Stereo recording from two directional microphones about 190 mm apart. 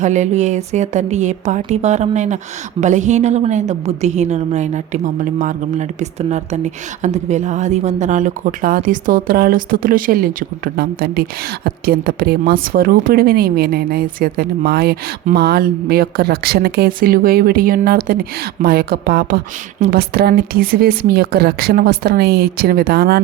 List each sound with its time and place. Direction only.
0.0 s a woman's voice: 40° right (ahead or behind); by 23.2 s 55° right (ahead or behind)